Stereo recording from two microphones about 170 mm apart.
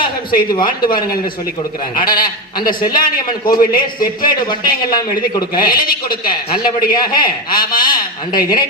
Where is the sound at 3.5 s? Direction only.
55° left (ahead or behind).